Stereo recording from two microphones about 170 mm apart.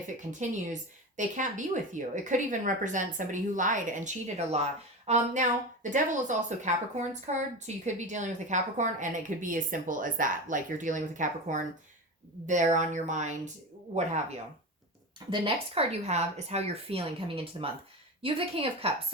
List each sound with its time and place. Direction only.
0.2 s a woman's voice: 45° right (ahead or behind)